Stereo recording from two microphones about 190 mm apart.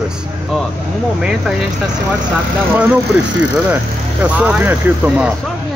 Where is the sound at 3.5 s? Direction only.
5° right (ahead or behind).